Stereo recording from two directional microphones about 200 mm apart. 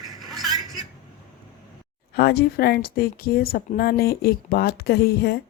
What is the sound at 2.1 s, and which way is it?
A woman's voice, 50° left (ahead or behind).